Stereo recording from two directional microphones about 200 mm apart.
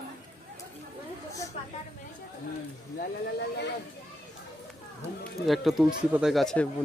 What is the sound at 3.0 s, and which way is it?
Speech, 55° left (ahead or behind).